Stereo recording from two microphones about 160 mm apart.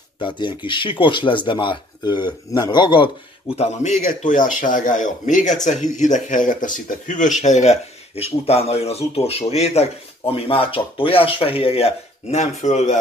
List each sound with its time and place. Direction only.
0.2 s speech: 30° left (ahead or behind)
3.5 s speech: 45° left (ahead or behind)